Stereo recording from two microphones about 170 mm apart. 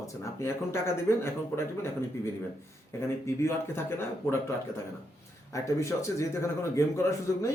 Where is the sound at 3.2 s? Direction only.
15° left (ahead or behind).